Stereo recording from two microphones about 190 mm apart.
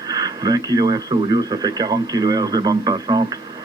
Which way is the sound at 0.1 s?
20° right (ahead or behind).